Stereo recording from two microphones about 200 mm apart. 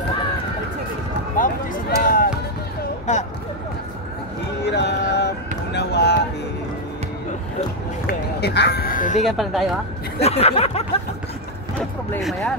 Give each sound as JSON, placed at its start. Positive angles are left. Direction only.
{"t": 1.3, "sound": "music", "side_deg": 40}
{"t": 3.1, "sound": "speech", "side_deg": 35}
{"t": 4.6, "sound": "a sound", "side_deg": 60}
{"t": 8.1, "sound": "speech", "side_deg": 55}
{"t": 9.2, "sound": "speech", "side_deg": 0}
{"t": 10.2, "sound": "speech", "side_deg": 30}
{"t": 12.1, "sound": "speech", "side_deg": 0}